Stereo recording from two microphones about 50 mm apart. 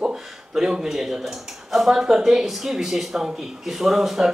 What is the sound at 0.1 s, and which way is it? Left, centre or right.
Speech, centre.